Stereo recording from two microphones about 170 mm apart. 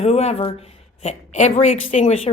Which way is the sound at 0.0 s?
40° left (ahead or behind).